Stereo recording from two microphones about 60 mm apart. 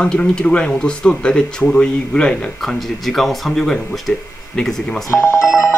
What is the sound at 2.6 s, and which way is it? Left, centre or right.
Speech, centre.